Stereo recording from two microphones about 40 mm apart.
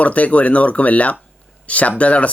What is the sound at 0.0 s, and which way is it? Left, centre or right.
Speech, left.